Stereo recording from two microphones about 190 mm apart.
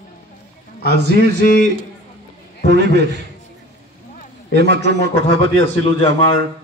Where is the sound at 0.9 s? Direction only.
60° right (ahead or behind).